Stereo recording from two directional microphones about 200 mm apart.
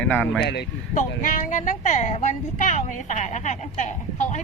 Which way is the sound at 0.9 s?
40° left (ahead or behind).